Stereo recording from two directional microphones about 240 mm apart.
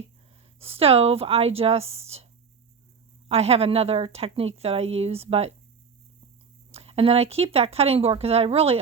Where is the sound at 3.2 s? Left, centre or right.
Right.